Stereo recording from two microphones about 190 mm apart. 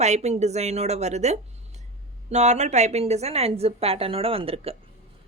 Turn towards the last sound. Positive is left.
turn(degrees=-30)  # may be behind; listen again after turning